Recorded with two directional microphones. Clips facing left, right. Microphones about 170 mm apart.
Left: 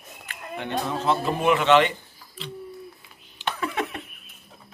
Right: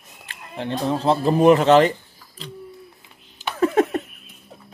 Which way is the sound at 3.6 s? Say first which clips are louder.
Right 13 dB; 40° right (ahead or behind).